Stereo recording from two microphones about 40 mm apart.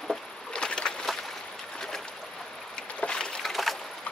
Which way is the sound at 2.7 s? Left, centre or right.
Left.